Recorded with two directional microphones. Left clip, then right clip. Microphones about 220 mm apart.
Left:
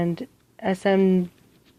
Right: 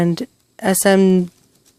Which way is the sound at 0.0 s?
50° right (ahead or behind).